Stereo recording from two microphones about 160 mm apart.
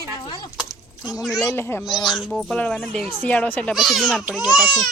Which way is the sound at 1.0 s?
Centre (ahead or behind).